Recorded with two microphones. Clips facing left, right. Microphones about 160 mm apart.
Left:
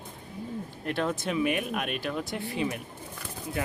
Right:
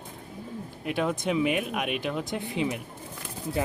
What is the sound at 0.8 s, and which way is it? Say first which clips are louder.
Speech: right 2 dB; 10° right (ahead or behind).